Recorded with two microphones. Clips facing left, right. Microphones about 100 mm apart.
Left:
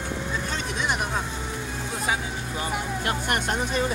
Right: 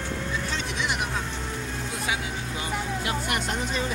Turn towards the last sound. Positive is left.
turn(degrees=50)  # may be behind; listen again after turning